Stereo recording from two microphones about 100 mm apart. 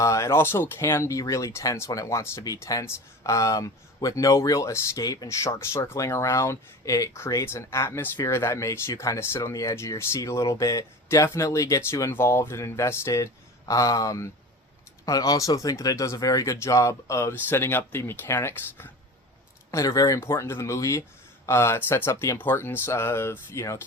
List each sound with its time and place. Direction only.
0.0 s speech: 30° left (ahead or behind)